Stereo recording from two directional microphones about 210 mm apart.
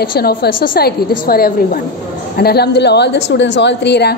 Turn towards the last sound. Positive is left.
turn(degrees=55)  # may be behind; listen again after turning